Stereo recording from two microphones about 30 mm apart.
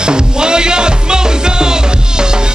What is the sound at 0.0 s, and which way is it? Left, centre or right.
Music, right.